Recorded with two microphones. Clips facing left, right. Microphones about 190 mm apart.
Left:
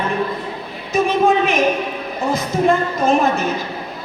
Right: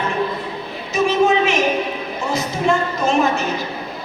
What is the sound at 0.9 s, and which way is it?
A woman's voice, 55° left (ahead or behind).